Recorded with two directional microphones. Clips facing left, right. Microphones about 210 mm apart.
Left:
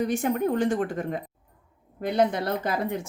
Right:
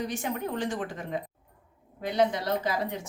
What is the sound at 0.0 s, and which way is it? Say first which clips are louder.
Speech: left 7 dB; 55° left (ahead or behind).